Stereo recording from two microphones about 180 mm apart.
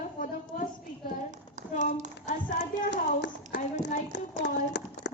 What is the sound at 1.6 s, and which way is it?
Speech, 45° right (ahead or behind).